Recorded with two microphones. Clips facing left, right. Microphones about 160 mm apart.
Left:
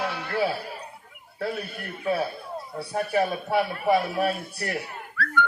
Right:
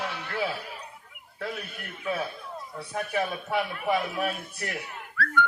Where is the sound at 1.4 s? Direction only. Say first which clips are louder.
Left 5 dB; 35° left (ahead or behind).